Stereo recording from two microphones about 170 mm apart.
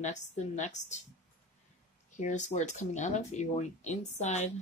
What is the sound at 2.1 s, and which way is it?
A woman's voice, 45° left (ahead or behind).